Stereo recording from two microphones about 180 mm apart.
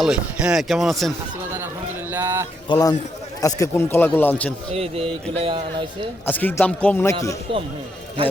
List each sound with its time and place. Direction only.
0.0 s speech: 5° right (ahead or behind)
2.0 s speech: 15° right (ahead or behind)
2.6 s a man's voice: 20° left (ahead or behind)
4.7 s speech: 35° right (ahead or behind)
6.2 s speech: 10° left (ahead or behind)